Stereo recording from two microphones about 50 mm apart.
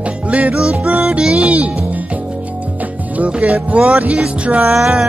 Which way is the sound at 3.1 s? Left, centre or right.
Right.